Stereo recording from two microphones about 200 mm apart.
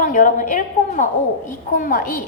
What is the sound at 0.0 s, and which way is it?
A woman's voice, 40° left (ahead or behind).